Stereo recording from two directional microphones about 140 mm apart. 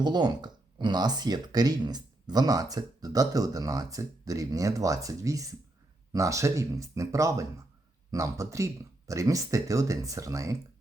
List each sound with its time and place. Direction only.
0.0 s speech: 30° right (ahead or behind)